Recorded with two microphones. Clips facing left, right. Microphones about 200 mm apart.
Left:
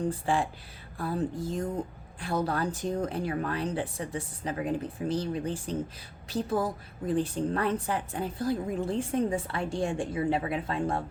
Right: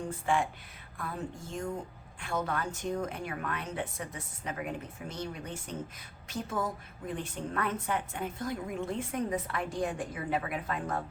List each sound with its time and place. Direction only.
0.0 s a woman's voice: 35° left (ahead or behind)